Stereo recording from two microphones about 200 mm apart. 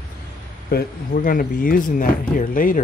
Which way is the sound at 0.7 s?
45° left (ahead or behind).